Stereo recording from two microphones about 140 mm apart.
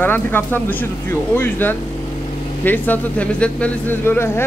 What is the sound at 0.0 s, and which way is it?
Speech, 15° left (ahead or behind).